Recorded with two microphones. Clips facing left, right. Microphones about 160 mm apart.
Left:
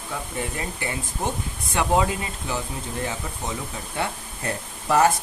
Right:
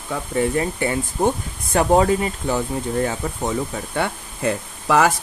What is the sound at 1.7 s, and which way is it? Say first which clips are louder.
Speech: right 6 dB; 45° right (ahead or behind).